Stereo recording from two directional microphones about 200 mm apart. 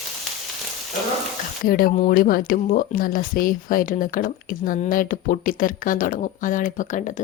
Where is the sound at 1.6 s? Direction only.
45° left (ahead or behind).